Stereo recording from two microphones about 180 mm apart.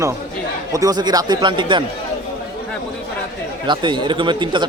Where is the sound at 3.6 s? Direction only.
25° right (ahead or behind).